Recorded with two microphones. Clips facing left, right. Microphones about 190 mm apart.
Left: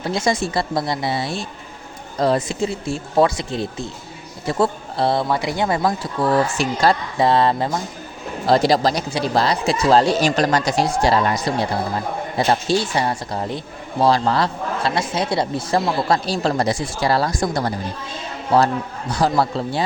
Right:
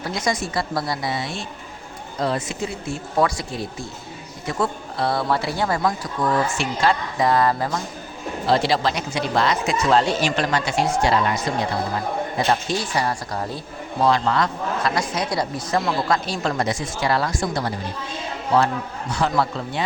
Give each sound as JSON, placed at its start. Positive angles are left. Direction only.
{"t": 0.0, "sound": "speech", "side_deg": 25}
{"t": 5.3, "sound": "speech", "side_deg": 15}
{"t": 5.8, "sound": "speech", "side_deg": 30}
{"t": 8.4, "sound": "a man's voice", "side_deg": 40}
{"t": 14.0, "sound": "a man's voice", "side_deg": 35}
{"t": 19.1, "sound": "a man's voice", "side_deg": 35}